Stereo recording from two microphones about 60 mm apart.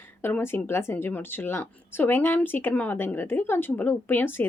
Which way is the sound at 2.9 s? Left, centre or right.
Left.